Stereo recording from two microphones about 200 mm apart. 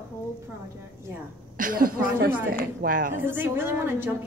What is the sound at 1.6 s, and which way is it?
A woman's voice, 45° right (ahead or behind).